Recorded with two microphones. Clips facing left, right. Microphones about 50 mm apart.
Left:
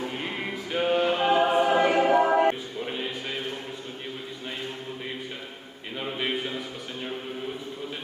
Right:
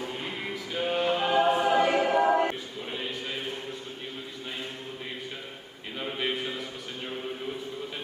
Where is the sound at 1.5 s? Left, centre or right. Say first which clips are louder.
Left 2 dB; centre.